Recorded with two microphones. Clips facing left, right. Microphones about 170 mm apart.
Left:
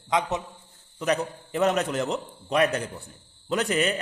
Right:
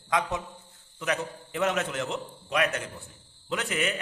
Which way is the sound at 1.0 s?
35° left (ahead or behind).